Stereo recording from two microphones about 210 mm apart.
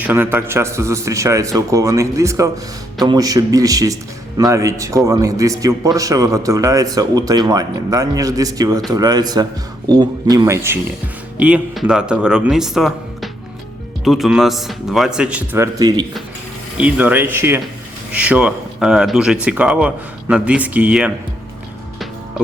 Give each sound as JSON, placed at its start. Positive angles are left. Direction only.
{"t": 0.0, "sound": "a man's voice", "side_deg": -10}
{"t": 16.7, "sound": "speech", "side_deg": -5}